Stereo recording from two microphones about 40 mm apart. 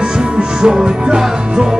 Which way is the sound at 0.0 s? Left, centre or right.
Right.